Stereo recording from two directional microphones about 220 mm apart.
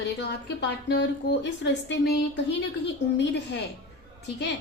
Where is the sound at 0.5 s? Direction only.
50° left (ahead or behind).